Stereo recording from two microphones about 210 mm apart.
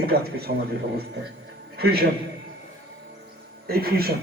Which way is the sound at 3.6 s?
45° right (ahead or behind).